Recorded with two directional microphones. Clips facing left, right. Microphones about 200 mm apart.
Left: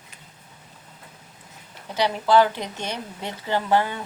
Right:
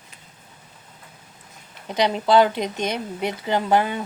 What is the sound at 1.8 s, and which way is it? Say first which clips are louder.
Speech: right 2 dB; 20° right (ahead or behind).